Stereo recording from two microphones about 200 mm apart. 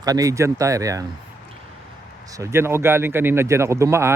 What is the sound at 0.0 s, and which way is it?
Speech, 15° right (ahead or behind).